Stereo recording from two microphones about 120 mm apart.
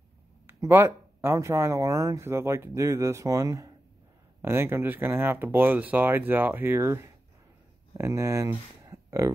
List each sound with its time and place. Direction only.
0.5 s speech: 20° right (ahead or behind)